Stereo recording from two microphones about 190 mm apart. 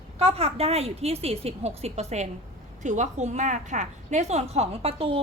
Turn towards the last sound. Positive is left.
turn(degrees=-30)  # may be behind; listen again after turning